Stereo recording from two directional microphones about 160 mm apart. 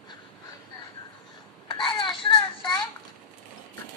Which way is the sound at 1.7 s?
30° left (ahead or behind).